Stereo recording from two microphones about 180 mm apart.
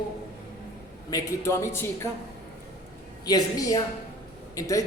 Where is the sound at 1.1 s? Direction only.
15° left (ahead or behind).